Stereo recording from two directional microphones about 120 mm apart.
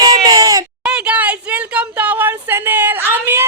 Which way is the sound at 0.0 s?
30° right (ahead or behind).